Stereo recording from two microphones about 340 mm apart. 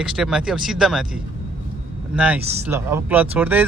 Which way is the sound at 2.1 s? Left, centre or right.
Centre.